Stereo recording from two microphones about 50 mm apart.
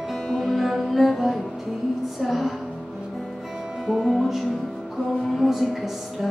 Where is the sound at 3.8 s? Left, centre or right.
Centre.